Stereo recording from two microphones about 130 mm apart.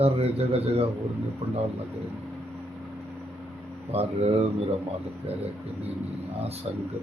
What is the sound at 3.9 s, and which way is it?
Speech, 50° right (ahead or behind).